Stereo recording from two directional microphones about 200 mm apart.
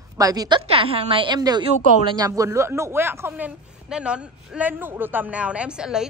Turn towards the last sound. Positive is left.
turn(degrees=-5)  # may be behind; listen again after turning